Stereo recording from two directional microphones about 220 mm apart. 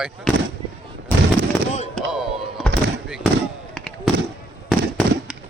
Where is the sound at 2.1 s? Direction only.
5° right (ahead or behind).